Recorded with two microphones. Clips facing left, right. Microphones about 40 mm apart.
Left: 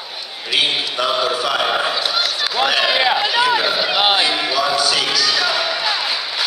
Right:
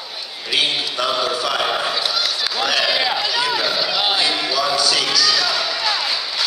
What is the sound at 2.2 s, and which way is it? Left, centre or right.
Run, centre.